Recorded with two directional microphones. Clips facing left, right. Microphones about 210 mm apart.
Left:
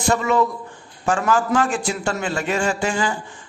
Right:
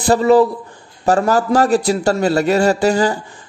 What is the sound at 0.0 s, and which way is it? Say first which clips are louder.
A man's voice: right 7 dB; 35° right (ahead or behind).